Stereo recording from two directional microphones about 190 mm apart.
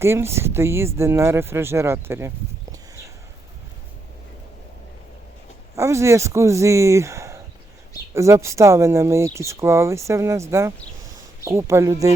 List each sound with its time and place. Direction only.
0.0 s speech: 15° right (ahead or behind)
5.7 s speech: 15° right (ahead or behind)